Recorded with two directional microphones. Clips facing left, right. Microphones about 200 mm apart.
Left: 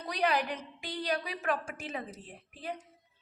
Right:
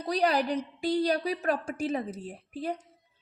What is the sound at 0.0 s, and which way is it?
A woman's voice, 35° right (ahead or behind).